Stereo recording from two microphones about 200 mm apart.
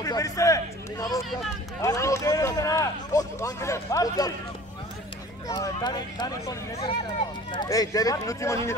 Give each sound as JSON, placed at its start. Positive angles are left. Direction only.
{"t": 0.0, "sound": "a sound", "side_deg": 15}
{"t": 1.8, "sound": "speech", "side_deg": 15}
{"t": 5.5, "sound": "speech", "side_deg": 20}